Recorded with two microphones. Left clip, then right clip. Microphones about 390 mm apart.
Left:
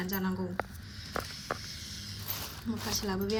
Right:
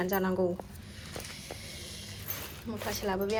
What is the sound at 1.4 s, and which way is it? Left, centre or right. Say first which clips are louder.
Snake: left 5 dB; centre.